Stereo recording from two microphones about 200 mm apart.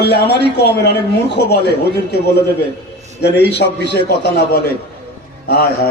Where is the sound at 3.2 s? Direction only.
60° left (ahead or behind).